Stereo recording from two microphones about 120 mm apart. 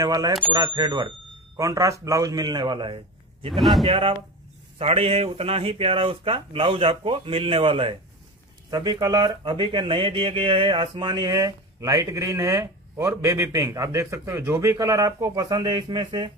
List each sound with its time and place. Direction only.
0.0 s speech: 30° right (ahead or behind)
1.6 s speech: 25° right (ahead or behind)
3.5 s speech: centre (ahead or behind)
3.8 s speech: 45° right (ahead or behind)
8.6 s speech: 35° right (ahead or behind)